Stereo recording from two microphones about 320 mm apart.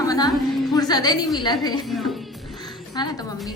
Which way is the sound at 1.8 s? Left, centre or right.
Centre.